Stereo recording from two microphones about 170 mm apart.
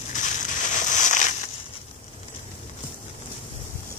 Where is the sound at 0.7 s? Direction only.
45° left (ahead or behind).